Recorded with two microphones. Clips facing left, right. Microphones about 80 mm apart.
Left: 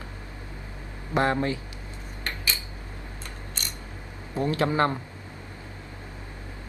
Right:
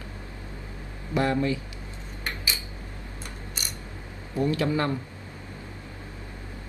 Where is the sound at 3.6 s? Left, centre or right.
Centre.